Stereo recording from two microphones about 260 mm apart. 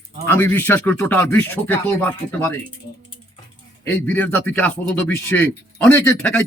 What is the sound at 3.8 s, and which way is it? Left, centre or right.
Speech, centre.